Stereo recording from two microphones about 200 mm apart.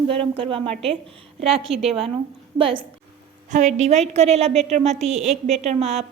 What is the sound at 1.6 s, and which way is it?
Speech, centre (ahead or behind).